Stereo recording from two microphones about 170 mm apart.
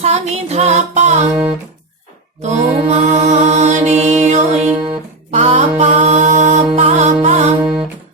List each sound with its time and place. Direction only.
0.0 s music: 40° right (ahead or behind)
2.4 s mantra: 40° right (ahead or behind)